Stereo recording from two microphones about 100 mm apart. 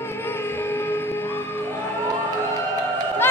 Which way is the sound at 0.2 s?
25° left (ahead or behind).